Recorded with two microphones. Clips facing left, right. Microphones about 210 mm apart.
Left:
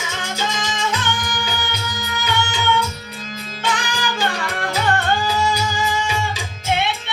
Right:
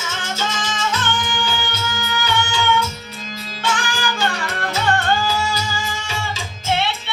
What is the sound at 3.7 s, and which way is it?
Music, 20° left (ahead or behind).